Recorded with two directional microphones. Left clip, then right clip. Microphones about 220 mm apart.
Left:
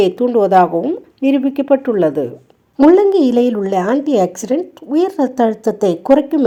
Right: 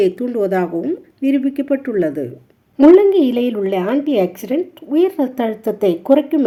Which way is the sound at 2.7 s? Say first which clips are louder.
Even; 20° left (ahead or behind).